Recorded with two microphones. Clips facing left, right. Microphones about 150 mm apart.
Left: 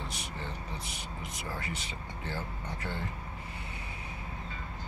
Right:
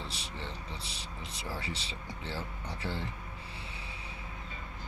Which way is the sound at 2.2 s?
30° right (ahead or behind).